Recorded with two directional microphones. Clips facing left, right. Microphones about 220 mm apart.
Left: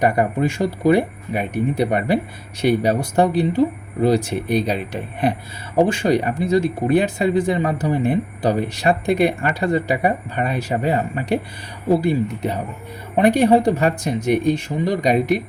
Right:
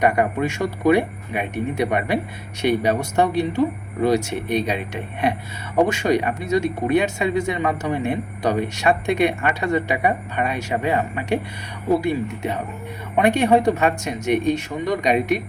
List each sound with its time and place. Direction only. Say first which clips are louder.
0.0 s speech: left 1 dB; 35° left (ahead or behind)